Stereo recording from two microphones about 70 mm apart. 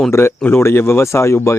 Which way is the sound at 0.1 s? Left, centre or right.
Left.